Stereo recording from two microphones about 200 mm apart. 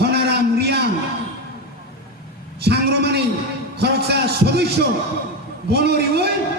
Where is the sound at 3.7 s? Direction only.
55° right (ahead or behind).